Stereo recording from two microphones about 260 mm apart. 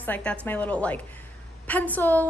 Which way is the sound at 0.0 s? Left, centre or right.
Centre.